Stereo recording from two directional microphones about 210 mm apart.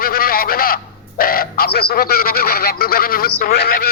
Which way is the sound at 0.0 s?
45° left (ahead or behind).